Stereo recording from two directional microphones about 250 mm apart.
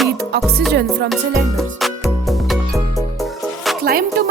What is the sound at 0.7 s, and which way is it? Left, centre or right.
Music, right.